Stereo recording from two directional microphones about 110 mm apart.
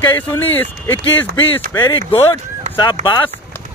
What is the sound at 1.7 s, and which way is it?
Speech, 35° left (ahead or behind).